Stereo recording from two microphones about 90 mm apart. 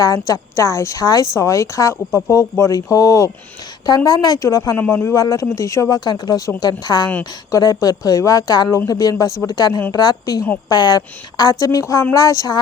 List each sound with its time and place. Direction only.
0.0 s a woman's voice: 40° left (ahead or behind)
3.8 s a woman's voice: 50° left (ahead or behind)
4.8 s speech: 25° left (ahead or behind)
5.1 s speech: 45° left (ahead or behind)
6.1 s a woman's voice: 55° left (ahead or behind)